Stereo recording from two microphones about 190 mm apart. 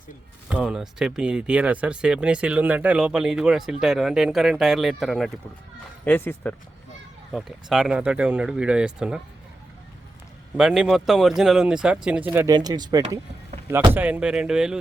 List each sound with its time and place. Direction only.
0.5 s speech: 5° right (ahead or behind)
7.3 s speech: centre (ahead or behind)
10.6 s speech: 5° right (ahead or behind)
12.5 s speech: 20° right (ahead or behind)
13.9 s speech: 10° right (ahead or behind)